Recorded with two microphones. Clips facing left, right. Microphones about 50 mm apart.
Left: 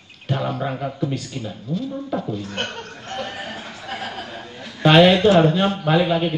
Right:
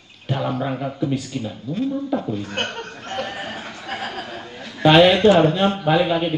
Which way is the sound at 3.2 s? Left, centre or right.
Centre.